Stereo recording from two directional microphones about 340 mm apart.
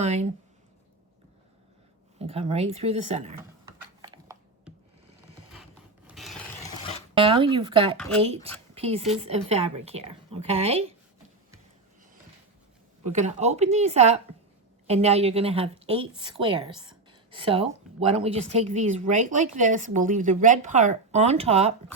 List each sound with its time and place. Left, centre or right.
0.0 s a woman's voice: centre
2.1 s speech: centre
3.7 s typing: centre
6.1 s filing: centre
7.1 s speech: centre
8.7 s a sound: centre
9.2 s speech: centre
13.1 s a woman's voice: centre